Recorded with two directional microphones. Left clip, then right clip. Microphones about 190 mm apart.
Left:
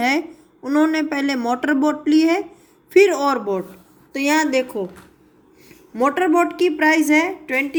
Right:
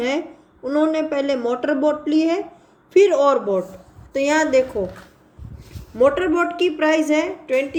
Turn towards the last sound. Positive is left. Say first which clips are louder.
# left 1 dB
turn(degrees=45)  # may be behind; listen again after turning